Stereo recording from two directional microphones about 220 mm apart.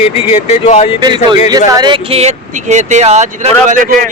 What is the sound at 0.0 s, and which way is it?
Speech, 30° left (ahead or behind).